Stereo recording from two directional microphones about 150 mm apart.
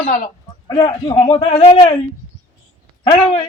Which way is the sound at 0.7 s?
30° left (ahead or behind).